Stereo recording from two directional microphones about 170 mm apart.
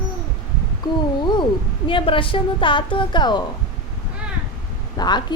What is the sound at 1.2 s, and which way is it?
A woman's voice, 25° left (ahead or behind).